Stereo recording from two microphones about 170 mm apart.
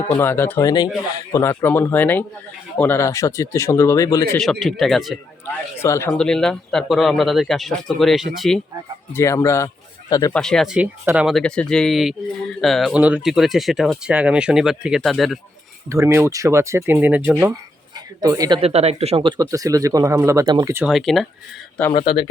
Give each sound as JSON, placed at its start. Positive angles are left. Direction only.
{"t": 0.2, "sound": "speech", "side_deg": 15}
{"t": 4.6, "sound": "speech", "side_deg": 0}
{"t": 5.5, "sound": "speech", "side_deg": 15}
{"t": 9.1, "sound": "speech", "side_deg": 15}
{"t": 10.3, "sound": "speech", "side_deg": 5}
{"t": 15.9, "sound": "speech", "side_deg": -15}
{"t": 18.2, "sound": "speech", "side_deg": -20}
{"t": 18.6, "sound": "speech", "side_deg": -40}
{"t": 19.5, "sound": "speech", "side_deg": -20}
{"t": 20.7, "sound": "speech", "side_deg": 0}